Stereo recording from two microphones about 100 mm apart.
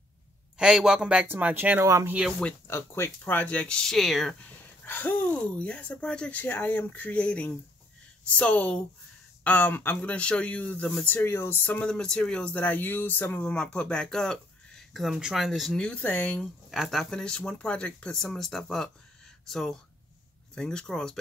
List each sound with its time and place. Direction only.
0.6 s a man's voice: 5° right (ahead or behind)
1.2 s speech: 20° right (ahead or behind)
1.9 s speech: 30° right (ahead or behind)
2.7 s speech: 20° left (ahead or behind); by 4.4 s centre (ahead or behind)
4.8 s a sound: 20° left (ahead or behind)
5.6 s speech: 15° left (ahead or behind)
11.8 s speech: 5° left (ahead or behind)
16.3 s speech: centre (ahead or behind)